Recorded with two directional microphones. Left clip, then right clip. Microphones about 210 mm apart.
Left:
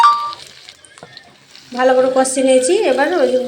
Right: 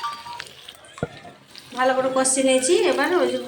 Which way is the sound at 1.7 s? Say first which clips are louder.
Left 8 dB; 15° left (ahead or behind).